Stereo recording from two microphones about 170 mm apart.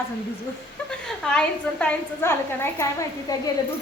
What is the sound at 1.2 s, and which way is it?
A woman's voice, 5° left (ahead or behind).